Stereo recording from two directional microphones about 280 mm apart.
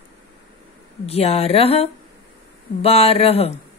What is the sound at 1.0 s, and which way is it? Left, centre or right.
A woman's voice, left.